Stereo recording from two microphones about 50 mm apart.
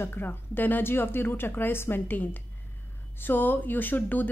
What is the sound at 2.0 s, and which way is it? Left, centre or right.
A woman's voice, left.